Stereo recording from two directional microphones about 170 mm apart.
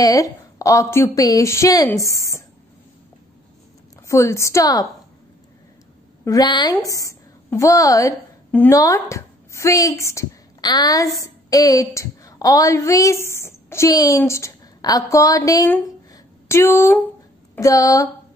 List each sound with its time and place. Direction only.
0.0 s a woman's voice: 20° left (ahead or behind)
4.1 s a woman's voice: 15° left (ahead or behind)
6.2 s a woman's voice: 20° left (ahead or behind)